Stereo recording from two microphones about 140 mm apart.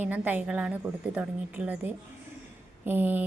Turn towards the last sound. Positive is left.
turn(degrees=-15)  # may be behind; listen again after turning